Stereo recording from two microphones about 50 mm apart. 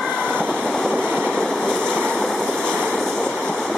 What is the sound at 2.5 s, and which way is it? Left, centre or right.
Train, centre.